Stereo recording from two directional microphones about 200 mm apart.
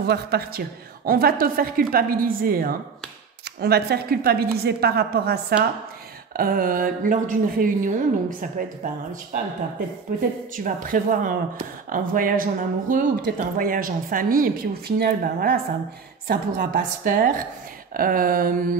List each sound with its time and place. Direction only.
0.0 s speech: 55° right (ahead or behind)
10.5 s speech: 40° right (ahead or behind)